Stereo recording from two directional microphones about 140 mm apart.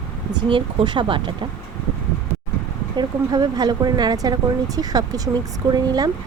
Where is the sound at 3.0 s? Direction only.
30° right (ahead or behind).